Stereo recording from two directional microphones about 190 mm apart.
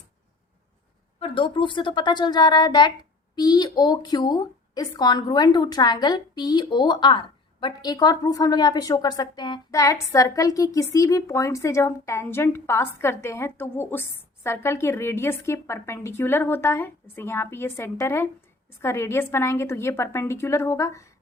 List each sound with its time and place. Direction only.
1.2 s a woman's voice: 25° left (ahead or behind)